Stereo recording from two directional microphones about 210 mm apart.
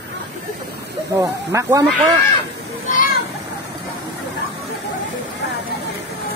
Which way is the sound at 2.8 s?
40° left (ahead or behind).